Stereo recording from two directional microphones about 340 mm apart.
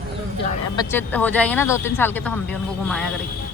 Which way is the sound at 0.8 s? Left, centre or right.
Centre.